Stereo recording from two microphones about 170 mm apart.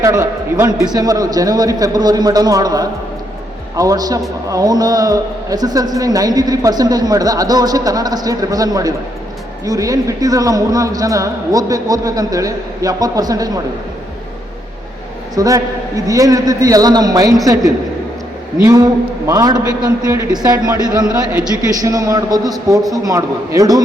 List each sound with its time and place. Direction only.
0.0 s a man's voice: 20° right (ahead or behind)
15.4 s a man's voice: 20° right (ahead or behind)
18.6 s a man's voice: 20° right (ahead or behind)
21.8 s a man's voice: 20° right (ahead or behind)